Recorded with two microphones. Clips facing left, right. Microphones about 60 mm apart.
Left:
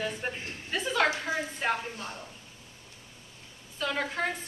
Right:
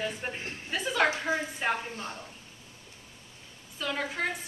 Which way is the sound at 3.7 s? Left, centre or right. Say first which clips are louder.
Left 1 dB; centre.